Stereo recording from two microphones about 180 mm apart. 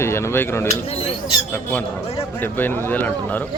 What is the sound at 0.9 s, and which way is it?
Speech, 30° left (ahead or behind).